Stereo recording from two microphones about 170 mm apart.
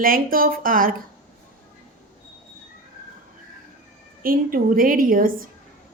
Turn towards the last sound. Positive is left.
turn(degrees=-55)  # may be behind; listen again after turning